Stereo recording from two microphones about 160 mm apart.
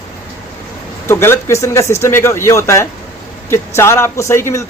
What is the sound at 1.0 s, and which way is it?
A man's voice, 15° left (ahead or behind).